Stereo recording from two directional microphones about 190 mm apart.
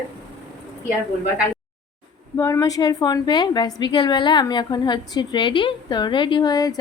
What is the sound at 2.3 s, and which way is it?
A woman's voice, 15° left (ahead or behind).